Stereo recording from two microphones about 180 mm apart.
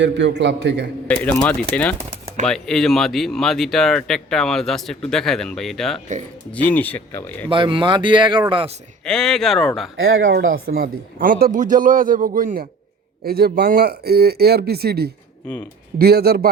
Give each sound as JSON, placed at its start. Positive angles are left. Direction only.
{"t": 0.0, "sound": "a man's voice", "side_deg": -80}
{"t": 1.0, "sound": "speech", "side_deg": 10}
{"t": 7.5, "sound": "speech", "side_deg": -30}
{"t": 9.0, "sound": "speech", "side_deg": 5}
{"t": 10.0, "sound": "speech", "side_deg": -90}
{"t": 10.8, "sound": "speech", "side_deg": -50}